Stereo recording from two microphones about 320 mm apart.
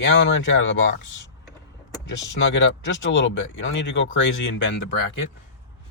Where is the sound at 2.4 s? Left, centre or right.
Left.